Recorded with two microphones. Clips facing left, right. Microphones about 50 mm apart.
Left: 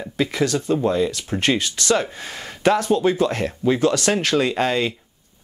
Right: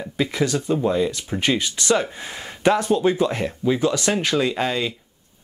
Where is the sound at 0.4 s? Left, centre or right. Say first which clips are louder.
Left 1 dB; centre.